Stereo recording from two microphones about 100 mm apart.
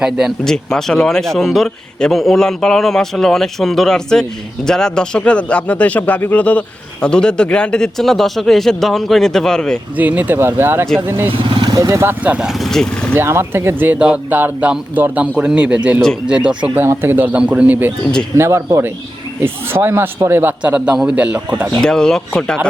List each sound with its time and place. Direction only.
0.0 s speech: 5° right (ahead or behind)
0.4 s a man's voice: 5° left (ahead or behind)
10.0 s speech: 15° right (ahead or behind)
11.3 s vehicle: 55° right (ahead or behind)
11.7 s speech: 30° right (ahead or behind)
12.2 s speech: 15° right (ahead or behind)
12.5 s speech: centre (ahead or behind)
13.1 s speech: 25° right (ahead or behind)
16.8 s speech: 25° right (ahead or behind)
18.3 s speech: 30° right (ahead or behind)
21.8 s speech: 5° left (ahead or behind)